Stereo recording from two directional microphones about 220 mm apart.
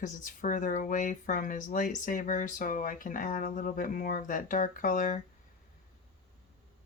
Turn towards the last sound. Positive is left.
turn(degrees=35)  # may be behind; listen again after turning